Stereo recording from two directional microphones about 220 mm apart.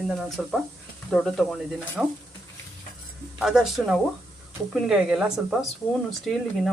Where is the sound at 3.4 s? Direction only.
Centre (ahead or behind).